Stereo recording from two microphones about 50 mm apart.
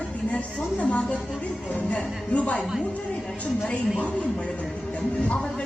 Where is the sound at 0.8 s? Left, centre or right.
Left.